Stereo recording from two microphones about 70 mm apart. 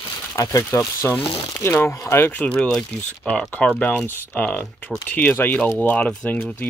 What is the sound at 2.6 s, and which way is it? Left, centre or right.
Speech, centre.